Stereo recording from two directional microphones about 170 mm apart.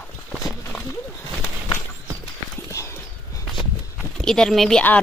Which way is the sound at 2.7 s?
15° left (ahead or behind).